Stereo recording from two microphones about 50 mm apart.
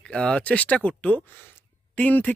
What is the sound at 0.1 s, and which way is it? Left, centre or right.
Speech, centre.